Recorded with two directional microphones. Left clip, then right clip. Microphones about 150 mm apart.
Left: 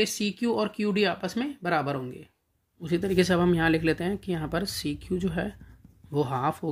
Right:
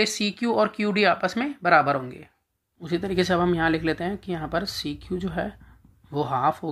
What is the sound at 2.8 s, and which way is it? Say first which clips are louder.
Speech: even; 40° left (ahead or behind).